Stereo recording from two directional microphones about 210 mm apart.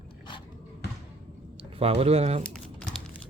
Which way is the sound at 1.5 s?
25° right (ahead or behind).